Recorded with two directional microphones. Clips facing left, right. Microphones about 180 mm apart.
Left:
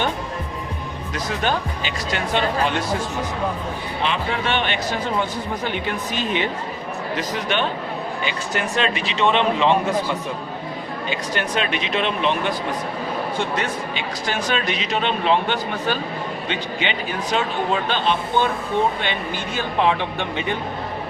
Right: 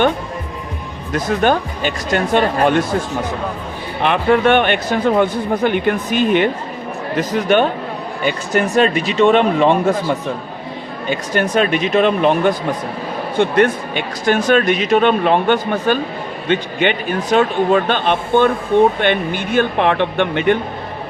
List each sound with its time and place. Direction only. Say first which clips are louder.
1.1 s speech: right 8 dB; 50° right (ahead or behind)
4.0 s a man's voice: right 11 dB; 55° right (ahead or behind)
11.1 s a man's voice: right 8 dB; 45° right (ahead or behind); by 20.6 s 60° right (ahead or behind)